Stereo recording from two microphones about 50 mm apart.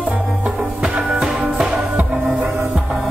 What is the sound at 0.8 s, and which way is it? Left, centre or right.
Music, right.